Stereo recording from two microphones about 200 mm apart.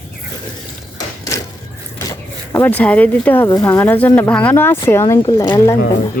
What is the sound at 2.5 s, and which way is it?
Speech, 10° left (ahead or behind).